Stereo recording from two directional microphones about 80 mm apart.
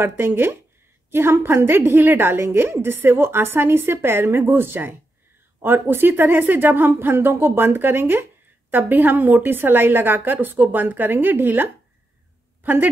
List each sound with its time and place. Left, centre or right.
0.0 s a woman's voice: right